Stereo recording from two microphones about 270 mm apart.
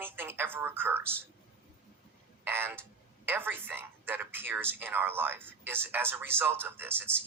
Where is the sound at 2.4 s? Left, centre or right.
Centre.